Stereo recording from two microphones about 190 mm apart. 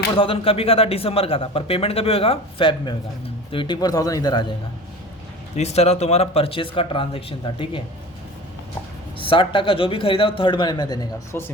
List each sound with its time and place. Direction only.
0.2 s a man's voice: 30° left (ahead or behind)
5.5 s a man's voice: 35° left (ahead or behind)
9.1 s a man's voice: 25° left (ahead or behind)